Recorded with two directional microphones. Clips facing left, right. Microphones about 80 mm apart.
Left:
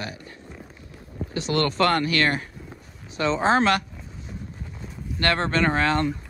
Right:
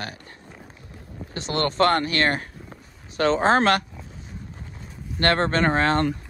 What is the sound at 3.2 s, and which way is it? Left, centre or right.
Speech, right.